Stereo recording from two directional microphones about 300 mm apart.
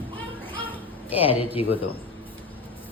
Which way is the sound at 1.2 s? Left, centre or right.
Centre.